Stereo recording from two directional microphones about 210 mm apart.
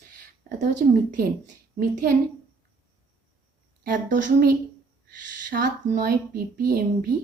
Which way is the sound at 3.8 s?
45° right (ahead or behind).